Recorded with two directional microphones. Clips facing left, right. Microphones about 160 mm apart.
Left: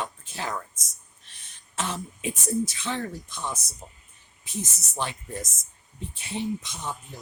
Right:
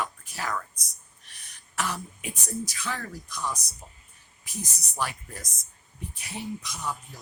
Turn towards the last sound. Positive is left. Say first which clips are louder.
# left 2 dB
turn(degrees=25)  # may be behind; listen again after turning